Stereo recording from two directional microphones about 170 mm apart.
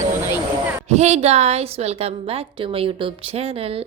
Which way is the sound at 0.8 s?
40° right (ahead or behind).